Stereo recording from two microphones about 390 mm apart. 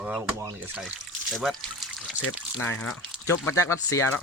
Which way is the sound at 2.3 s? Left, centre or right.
Centre.